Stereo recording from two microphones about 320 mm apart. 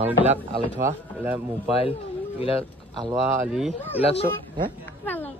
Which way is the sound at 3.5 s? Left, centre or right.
Centre.